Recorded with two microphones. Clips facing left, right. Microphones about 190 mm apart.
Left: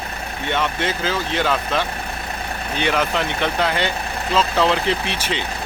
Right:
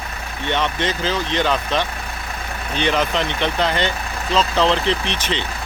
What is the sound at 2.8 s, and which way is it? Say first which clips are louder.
Speech: right 1 dB; 10° left (ahead or behind).